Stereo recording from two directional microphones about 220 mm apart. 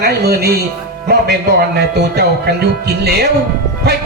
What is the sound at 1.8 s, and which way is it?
Speech, 45° right (ahead or behind).